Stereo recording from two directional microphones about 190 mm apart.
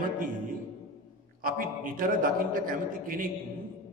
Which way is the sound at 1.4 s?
50° right (ahead or behind).